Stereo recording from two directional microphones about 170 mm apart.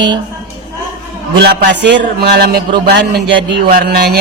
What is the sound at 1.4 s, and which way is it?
A man's voice, 75° right (ahead or behind).